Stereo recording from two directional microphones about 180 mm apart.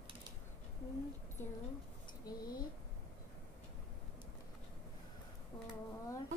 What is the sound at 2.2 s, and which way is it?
Speech, 20° left (ahead or behind).